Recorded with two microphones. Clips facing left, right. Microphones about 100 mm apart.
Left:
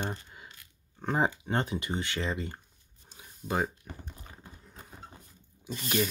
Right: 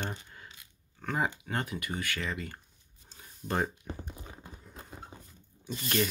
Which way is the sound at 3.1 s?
10° left (ahead or behind).